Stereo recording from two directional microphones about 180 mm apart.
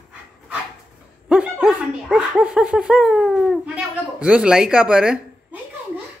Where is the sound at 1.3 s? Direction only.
5° right (ahead or behind).